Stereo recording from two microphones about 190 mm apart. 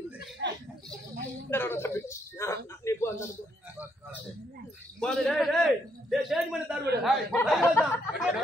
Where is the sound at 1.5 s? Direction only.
10° left (ahead or behind).